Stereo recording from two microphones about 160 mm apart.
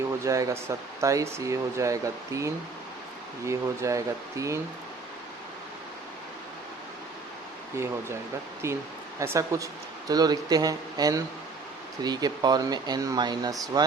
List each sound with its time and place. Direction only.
0.3 s speech: 20° right (ahead or behind)
8.6 s speech: 15° right (ahead or behind)